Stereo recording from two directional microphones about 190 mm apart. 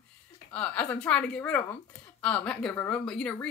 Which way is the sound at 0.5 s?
5° left (ahead or behind).